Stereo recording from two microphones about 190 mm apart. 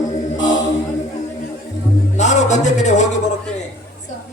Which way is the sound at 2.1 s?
40° left (ahead or behind).